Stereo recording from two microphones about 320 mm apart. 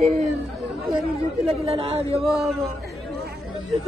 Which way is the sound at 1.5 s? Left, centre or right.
Centre.